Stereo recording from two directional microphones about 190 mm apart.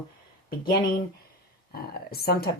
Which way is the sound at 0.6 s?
50° left (ahead or behind).